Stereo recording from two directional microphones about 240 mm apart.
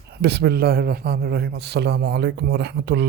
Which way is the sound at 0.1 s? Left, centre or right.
Right.